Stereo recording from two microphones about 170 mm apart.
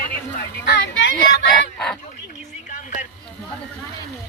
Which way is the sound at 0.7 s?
90° left.